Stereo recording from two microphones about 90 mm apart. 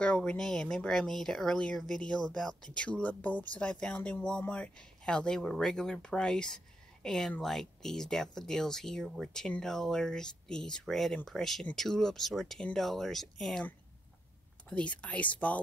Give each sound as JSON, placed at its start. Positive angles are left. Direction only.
{"t": 0.0, "sound": "speech", "side_deg": 10}
{"t": 14.7, "sound": "speech", "side_deg": 15}